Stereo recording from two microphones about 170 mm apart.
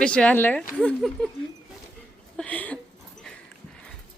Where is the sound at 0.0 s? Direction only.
5° left (ahead or behind).